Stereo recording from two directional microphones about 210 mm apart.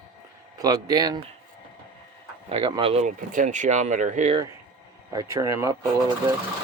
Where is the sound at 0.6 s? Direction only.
15° right (ahead or behind).